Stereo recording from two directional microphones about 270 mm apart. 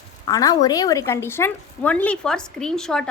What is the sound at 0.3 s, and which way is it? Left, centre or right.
A woman's voice, centre.